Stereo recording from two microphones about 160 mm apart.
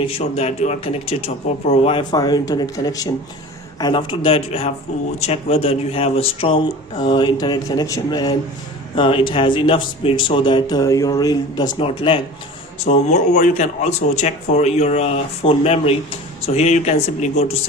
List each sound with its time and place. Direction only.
0.0 s speech: 40° left (ahead or behind)
11.8 s speech: 35° left (ahead or behind)
12.8 s speech: 45° left (ahead or behind)